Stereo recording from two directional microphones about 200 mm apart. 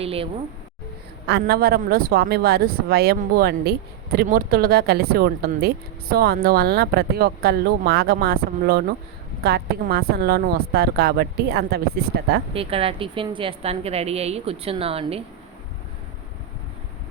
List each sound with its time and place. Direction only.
0.0 s a woman's voice: 30° right (ahead or behind)
1.3 s speech: 55° right (ahead or behind)
12.5 s a woman's voice: 30° right (ahead or behind)